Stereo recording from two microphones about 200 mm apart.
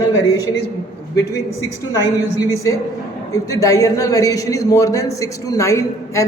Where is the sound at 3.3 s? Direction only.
15° left (ahead or behind).